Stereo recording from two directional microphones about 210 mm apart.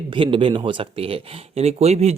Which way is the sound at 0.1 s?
25° right (ahead or behind).